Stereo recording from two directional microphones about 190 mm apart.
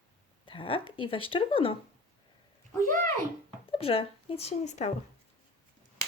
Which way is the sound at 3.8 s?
30° left (ahead or behind).